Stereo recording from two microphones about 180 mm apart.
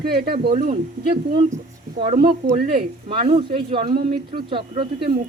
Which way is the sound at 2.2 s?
55° right (ahead or behind).